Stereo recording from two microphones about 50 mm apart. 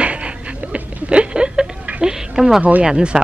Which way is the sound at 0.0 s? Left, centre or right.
Right.